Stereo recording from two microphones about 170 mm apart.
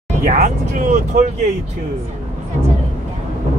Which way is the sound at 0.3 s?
50° right (ahead or behind).